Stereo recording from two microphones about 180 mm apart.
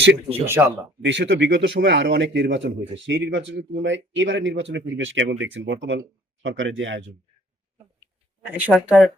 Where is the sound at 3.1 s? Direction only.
90° right.